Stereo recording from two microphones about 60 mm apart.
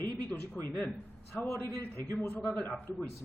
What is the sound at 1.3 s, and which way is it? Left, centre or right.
Speech, left.